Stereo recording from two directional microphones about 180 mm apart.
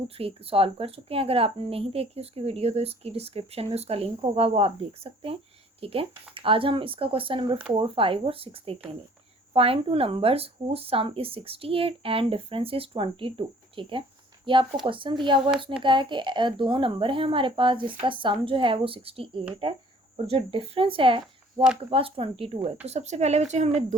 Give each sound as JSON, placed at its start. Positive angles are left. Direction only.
{"t": 0.2, "sound": "a woman's voice", "side_deg": -30}